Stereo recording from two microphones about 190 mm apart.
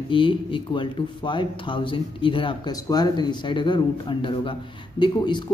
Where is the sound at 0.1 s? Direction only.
25° left (ahead or behind).